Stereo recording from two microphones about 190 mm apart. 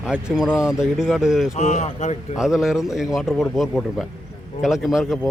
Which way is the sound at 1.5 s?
40° left (ahead or behind).